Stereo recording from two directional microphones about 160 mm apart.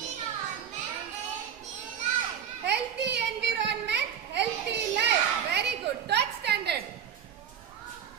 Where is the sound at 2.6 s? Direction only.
90° right.